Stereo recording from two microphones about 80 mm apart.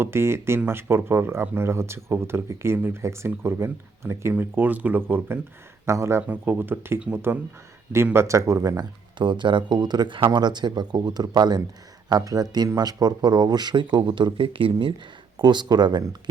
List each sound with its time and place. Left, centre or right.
0.0 s speech: right
6.2 s speech: right
9.1 s speech: right
15.4 s speech: right